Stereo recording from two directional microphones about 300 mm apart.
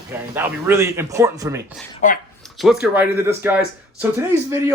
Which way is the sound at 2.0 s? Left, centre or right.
Left.